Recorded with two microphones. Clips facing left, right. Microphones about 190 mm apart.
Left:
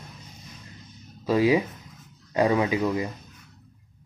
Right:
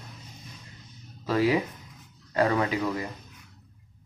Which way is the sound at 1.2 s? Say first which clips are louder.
Left 3 dB; 15° left (ahead or behind).